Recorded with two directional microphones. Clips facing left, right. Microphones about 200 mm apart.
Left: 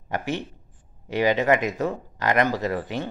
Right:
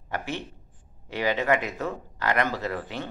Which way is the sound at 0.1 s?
15° left (ahead or behind).